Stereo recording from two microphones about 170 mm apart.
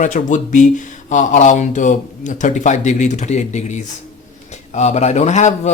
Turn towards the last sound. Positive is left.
turn(degrees=45)  # may be behind; listen again after turning